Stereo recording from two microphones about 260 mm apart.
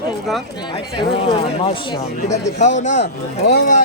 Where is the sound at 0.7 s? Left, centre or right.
Left.